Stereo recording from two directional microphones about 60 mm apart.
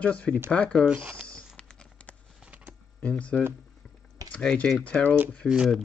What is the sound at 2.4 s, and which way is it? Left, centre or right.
Computer keyboard, right.